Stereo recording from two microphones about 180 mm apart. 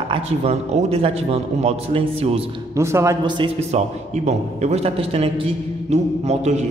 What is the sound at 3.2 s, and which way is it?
Speech, 25° right (ahead or behind).